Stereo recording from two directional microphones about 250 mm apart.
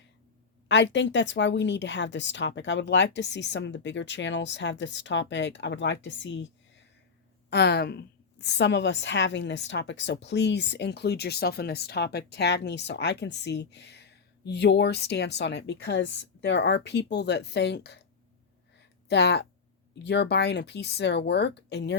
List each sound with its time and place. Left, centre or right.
0.7 s a woman's voice: left
7.5 s a woman's voice: left
19.0 s a woman's voice: left